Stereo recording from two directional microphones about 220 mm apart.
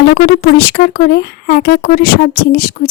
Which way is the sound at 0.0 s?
50° left (ahead or behind).